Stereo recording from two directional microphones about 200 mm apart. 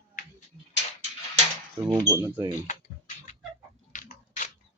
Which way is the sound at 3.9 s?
40° left (ahead or behind).